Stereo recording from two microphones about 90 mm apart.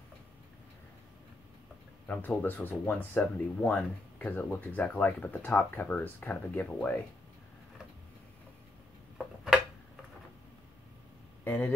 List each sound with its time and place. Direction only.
2.0 s speech: 20° left (ahead or behind)
11.4 s speech: 25° left (ahead or behind)